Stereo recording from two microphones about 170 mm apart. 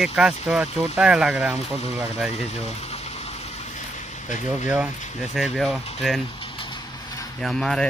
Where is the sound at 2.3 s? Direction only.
40° left (ahead or behind).